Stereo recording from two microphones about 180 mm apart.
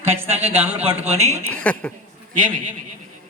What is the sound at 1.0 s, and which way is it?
Speech, 35° right (ahead or behind).